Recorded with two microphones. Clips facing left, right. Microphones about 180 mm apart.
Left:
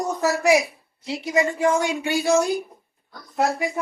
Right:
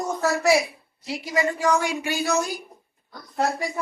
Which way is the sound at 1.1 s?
25° left (ahead or behind).